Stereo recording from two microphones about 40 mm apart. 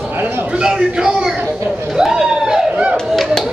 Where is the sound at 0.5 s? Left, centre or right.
Centre.